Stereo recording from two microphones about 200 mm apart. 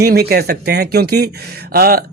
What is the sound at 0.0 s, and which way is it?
A man's voice, 50° right (ahead or behind).